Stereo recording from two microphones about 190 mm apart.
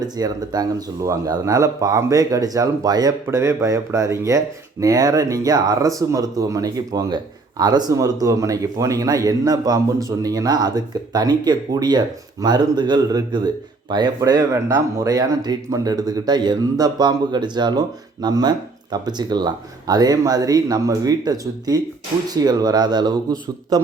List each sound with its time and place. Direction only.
0.0 s speech: 20° right (ahead or behind)